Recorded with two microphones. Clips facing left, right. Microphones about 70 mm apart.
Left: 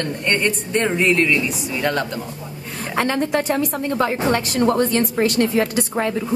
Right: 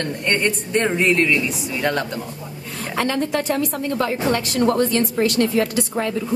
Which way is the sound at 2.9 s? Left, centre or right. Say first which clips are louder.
Left 2 dB; left.